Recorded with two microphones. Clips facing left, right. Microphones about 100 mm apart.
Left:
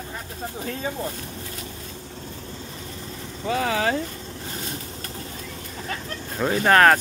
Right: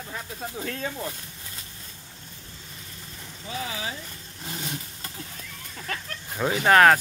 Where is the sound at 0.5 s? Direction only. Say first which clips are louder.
Left 3 dB; 15° left (ahead or behind).